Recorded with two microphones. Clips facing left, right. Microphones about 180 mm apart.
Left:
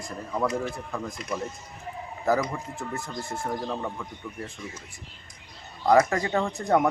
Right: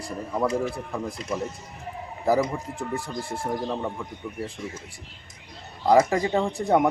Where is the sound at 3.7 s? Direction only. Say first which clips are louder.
Right 2 dB; 10° right (ahead or behind).